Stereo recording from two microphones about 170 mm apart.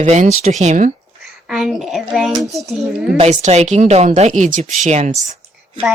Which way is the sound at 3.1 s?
40° right (ahead or behind).